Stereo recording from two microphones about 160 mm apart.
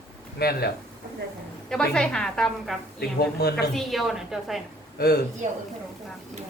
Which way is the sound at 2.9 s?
90° left.